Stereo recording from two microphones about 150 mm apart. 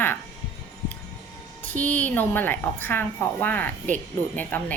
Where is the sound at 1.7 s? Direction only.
10° left (ahead or behind).